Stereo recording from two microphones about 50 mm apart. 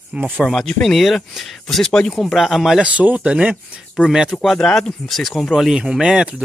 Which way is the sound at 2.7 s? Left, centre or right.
Right.